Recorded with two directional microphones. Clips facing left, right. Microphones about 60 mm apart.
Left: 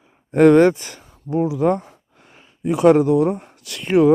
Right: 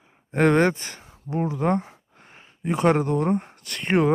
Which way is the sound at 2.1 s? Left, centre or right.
Right.